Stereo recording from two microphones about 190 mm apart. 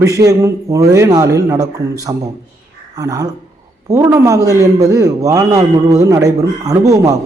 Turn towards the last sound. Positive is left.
turn(degrees=-15)  # may be behind; listen again after turning